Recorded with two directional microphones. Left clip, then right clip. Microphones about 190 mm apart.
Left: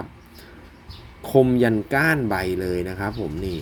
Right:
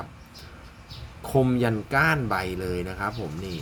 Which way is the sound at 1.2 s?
15° left (ahead or behind).